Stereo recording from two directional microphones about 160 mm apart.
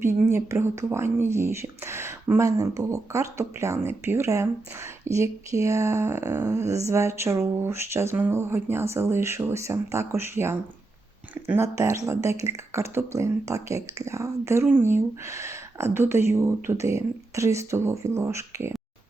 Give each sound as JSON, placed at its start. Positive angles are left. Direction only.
{"t": 0.0, "sound": "speech", "side_deg": -15}